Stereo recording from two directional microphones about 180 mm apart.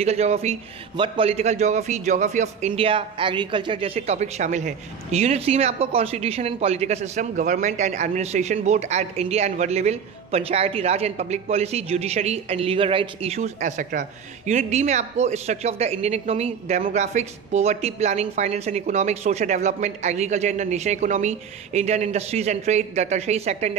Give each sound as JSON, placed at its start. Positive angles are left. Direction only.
{"t": 0.0, "sound": "a man's voice", "side_deg": -35}